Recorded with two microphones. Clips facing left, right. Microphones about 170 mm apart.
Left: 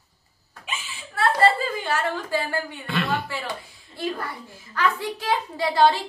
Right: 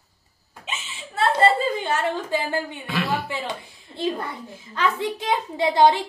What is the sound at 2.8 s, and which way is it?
Speech, centre (ahead or behind).